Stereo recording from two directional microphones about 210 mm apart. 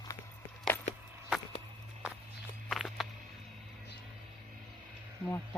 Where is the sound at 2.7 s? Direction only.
Centre (ahead or behind).